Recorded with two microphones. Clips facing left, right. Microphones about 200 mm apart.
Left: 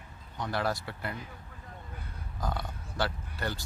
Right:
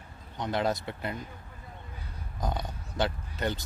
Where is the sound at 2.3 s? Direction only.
20° right (ahead or behind).